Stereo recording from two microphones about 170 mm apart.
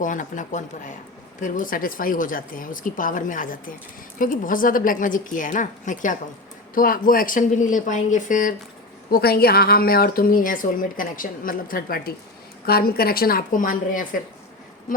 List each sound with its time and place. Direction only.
0.0 s a woman's voice: 50° left (ahead or behind)
9.0 s a woman's voice: 65° left (ahead or behind)